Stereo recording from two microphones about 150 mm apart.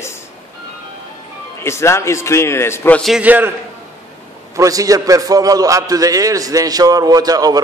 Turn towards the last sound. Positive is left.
turn(degrees=-25)  # may be behind; listen again after turning